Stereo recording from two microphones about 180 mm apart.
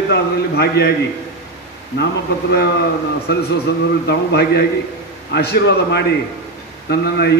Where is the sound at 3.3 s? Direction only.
65° left (ahead or behind).